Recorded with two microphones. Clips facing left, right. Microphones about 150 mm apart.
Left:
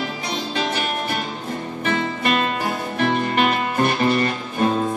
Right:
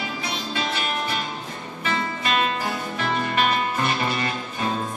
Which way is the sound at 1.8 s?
55° left (ahead or behind).